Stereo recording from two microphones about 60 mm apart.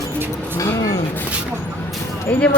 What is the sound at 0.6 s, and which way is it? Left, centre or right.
Vehicle, left.